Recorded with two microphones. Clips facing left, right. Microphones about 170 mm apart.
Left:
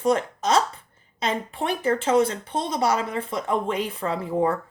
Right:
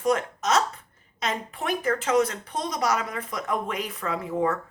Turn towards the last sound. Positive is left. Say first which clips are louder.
# left 3 dB
turn(degrees=30)  # may be behind; listen again after turning